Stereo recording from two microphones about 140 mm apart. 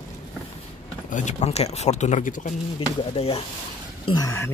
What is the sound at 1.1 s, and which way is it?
Speech, 60° left (ahead or behind).